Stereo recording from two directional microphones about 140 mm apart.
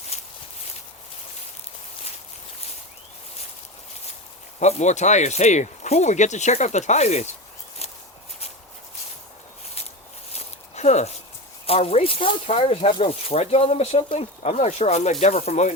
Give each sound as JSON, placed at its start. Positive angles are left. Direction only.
{"t": 0.1, "sound": "walk", "side_deg": 50}
{"t": 4.6, "sound": "speech", "side_deg": 55}
{"t": 7.8, "sound": "walk", "side_deg": 50}
{"t": 10.3, "sound": "a sound", "side_deg": 55}
{"t": 11.6, "sound": "speech", "side_deg": 45}